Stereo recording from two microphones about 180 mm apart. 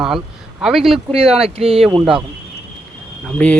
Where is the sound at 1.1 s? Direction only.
30° right (ahead or behind).